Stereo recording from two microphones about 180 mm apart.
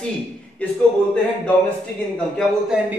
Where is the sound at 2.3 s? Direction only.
5° right (ahead or behind).